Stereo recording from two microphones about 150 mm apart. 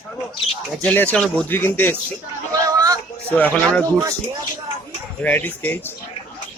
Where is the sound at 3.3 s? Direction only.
10° left (ahead or behind).